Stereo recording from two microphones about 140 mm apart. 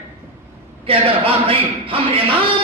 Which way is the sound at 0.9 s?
40° right (ahead or behind).